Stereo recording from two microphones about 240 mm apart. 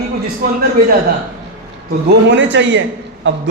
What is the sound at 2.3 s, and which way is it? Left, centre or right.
A man's voice, right.